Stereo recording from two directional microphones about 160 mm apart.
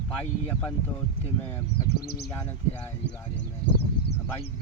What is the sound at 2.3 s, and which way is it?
Speech, 15° left (ahead or behind).